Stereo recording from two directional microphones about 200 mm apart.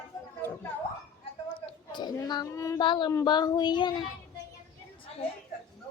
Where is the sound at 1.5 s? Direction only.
20° left (ahead or behind).